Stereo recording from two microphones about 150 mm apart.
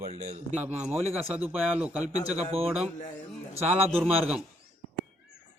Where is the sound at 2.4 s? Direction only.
40° right (ahead or behind).